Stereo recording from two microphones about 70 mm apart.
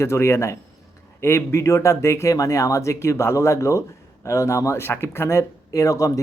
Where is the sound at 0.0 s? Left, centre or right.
Left.